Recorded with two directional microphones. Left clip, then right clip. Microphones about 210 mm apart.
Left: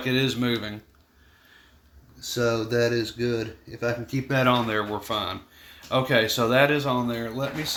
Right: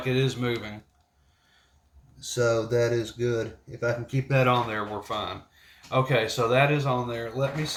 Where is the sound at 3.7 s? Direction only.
35° left (ahead or behind).